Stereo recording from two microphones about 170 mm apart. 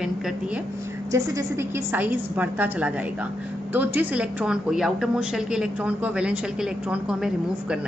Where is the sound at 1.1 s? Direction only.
15° right (ahead or behind).